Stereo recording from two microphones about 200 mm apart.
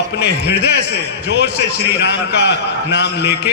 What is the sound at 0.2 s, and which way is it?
A man's voice, 55° left (ahead or behind).